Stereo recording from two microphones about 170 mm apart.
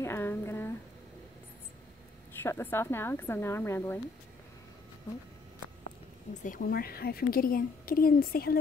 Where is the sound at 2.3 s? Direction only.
15° left (ahead or behind).